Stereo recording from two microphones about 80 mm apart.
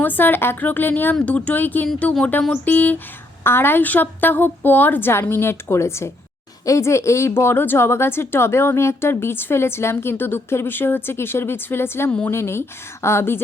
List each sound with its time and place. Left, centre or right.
0.0 s a woman's voice: left